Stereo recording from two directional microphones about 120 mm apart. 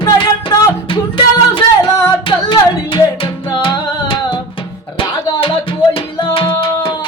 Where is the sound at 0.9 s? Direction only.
45° left (ahead or behind).